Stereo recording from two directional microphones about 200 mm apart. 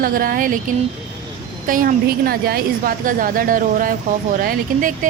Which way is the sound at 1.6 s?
45° right (ahead or behind).